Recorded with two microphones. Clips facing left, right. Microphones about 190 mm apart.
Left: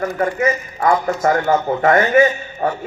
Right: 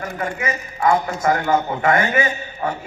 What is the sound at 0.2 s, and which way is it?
A man's voice, 45° left (ahead or behind).